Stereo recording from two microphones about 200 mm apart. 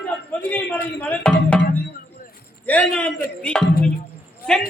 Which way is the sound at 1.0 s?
5° left (ahead or behind).